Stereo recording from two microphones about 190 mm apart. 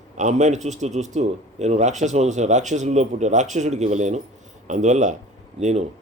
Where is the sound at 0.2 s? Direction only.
40° right (ahead or behind).